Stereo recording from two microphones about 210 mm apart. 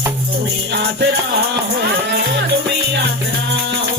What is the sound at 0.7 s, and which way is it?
Music, 55° right (ahead or behind).